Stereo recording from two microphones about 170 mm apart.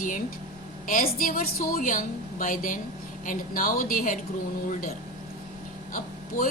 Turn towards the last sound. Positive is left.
turn(degrees=55)  # may be behind; listen again after turning